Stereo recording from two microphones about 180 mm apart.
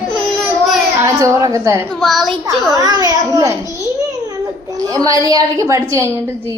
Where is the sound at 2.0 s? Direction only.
Centre (ahead or behind).